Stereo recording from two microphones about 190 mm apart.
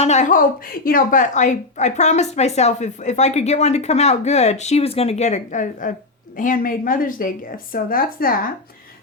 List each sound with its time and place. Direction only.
0.0 s a woman's voice: 35° left (ahead or behind)